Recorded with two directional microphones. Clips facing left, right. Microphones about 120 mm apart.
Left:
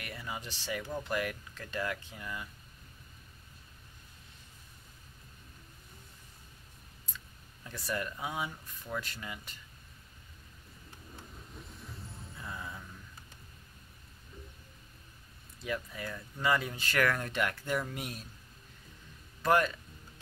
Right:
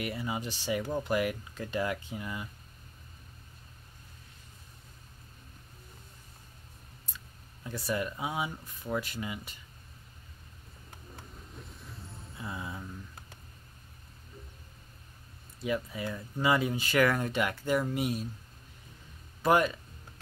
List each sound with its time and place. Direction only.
0.0 s speech: 20° right (ahead or behind)
7.6 s speech: 10° right (ahead or behind)
11.6 s music: centre (ahead or behind)
12.5 s speech: 20° right (ahead or behind)
15.6 s speech: 15° right (ahead or behind)
19.4 s speech: 15° right (ahead or behind)